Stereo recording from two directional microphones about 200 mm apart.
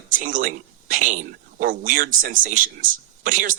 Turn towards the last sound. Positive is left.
turn(degrees=-40)  # may be behind; listen again after turning